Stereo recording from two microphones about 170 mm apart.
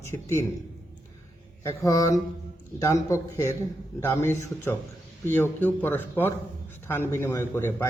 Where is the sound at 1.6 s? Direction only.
20° left (ahead or behind).